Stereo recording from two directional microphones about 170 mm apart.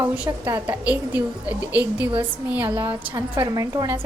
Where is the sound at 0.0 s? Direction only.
10° right (ahead or behind).